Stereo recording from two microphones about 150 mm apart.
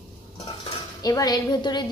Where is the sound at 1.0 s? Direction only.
25° left (ahead or behind).